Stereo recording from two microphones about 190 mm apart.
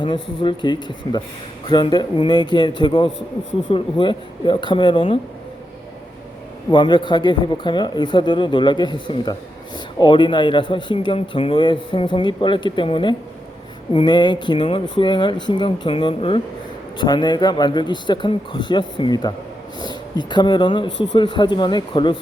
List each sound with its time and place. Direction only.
0.0 s a man's voice: 25° left (ahead or behind)
6.7 s a man's voice: 25° left (ahead or behind)